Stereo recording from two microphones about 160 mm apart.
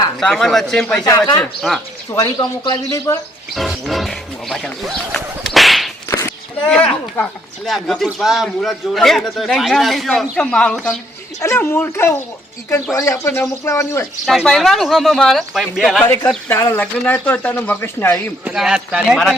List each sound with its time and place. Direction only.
0.2 s speech: centre (ahead or behind)
1.0 s speech: 25° left (ahead or behind)
1.4 s speech: centre (ahead or behind)
2.1 s speech: 25° left (ahead or behind)
3.5 s roaring cats: centre (ahead or behind)
6.1 s a sound: 20° left (ahead or behind)
6.7 s speech: 5° left (ahead or behind)
11.3 s speech: 15° left (ahead or behind)
14.3 s speech: centre (ahead or behind)
16.0 s speech: 15° left (ahead or behind)
18.4 s speech: 5° right (ahead or behind)